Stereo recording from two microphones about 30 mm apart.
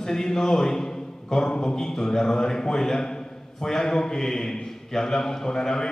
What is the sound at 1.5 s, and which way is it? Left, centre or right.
Speech, left.